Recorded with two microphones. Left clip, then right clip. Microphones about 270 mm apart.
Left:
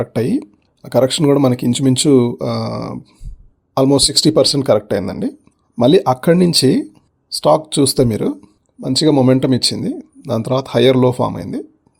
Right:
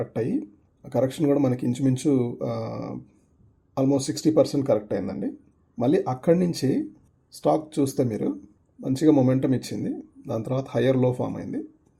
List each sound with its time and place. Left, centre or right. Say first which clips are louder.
0.0 s speech: left 9 dB; left